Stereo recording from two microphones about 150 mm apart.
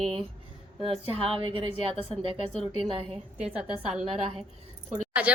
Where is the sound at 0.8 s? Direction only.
40° right (ahead or behind).